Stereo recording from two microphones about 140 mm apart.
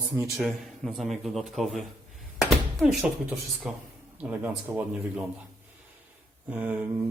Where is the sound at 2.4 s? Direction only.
Centre (ahead or behind).